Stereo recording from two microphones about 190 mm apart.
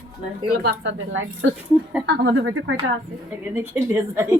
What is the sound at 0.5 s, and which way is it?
Speech, 60° right (ahead or behind).